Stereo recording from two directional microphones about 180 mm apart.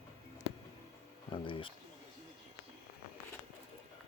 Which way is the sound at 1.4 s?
30° left (ahead or behind).